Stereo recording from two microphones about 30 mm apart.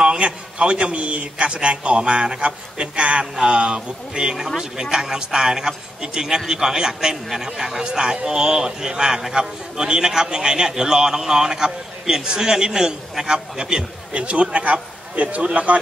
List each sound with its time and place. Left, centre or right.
0.0 s a man's voice: right
4.6 s a man's voice: centre
14.1 s a man's voice: right